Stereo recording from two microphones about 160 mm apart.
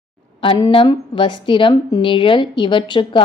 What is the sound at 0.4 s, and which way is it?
A woman's voice, 35° left (ahead or behind).